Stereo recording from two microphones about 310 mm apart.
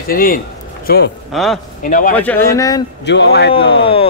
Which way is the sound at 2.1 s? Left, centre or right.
Centre.